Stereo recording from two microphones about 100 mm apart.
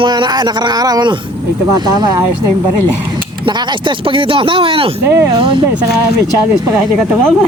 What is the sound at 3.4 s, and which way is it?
Speech, 55° right (ahead or behind).